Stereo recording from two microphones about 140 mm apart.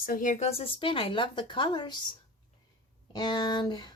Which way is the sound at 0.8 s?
40° left (ahead or behind).